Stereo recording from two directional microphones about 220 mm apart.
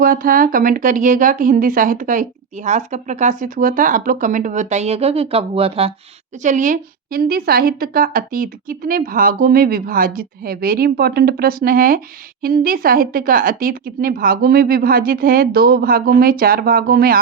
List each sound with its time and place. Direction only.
0.0 s a woman's voice: 40° right (ahead or behind)